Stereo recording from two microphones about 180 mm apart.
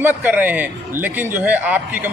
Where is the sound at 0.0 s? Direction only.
10° right (ahead or behind).